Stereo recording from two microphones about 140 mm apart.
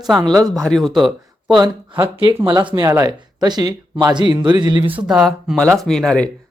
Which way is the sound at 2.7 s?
20° right (ahead or behind).